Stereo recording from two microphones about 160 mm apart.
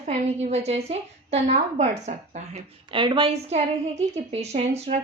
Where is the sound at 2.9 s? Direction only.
30° right (ahead or behind).